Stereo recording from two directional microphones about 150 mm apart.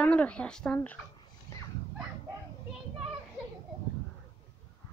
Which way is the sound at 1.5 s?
20° left (ahead or behind).